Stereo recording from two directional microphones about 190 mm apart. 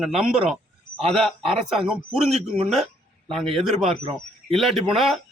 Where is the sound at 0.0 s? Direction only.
5° right (ahead or behind).